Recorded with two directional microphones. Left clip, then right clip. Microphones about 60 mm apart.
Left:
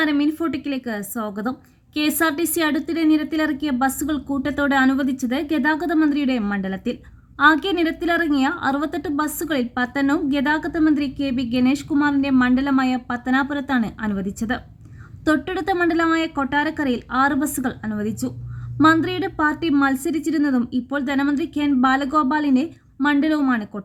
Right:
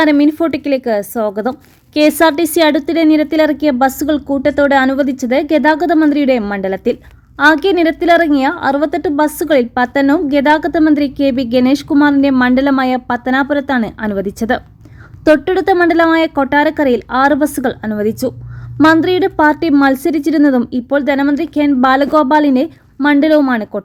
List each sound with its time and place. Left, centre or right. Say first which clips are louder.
0.0 s a woman's voice: right 9 dB; right
4.3 s a woman's voice: right 11 dB; centre; by 6.9 s right
7.3 s a woman's voice: right 6 dB; centre; by 12.5 s right
12.8 s a woman's voice: right 8 dB; right
13.1 s a woman's voice: right 7 dB; right
14.2 s a woman's voice: right 10 dB; right
18.8 s a woman's voice: right 6 dB; right
19.0 s a woman's voice: right 10 dB; right
20.9 s a woman's voice: right 10 dB; right
23.4 s a woman's voice: right 8 dB; right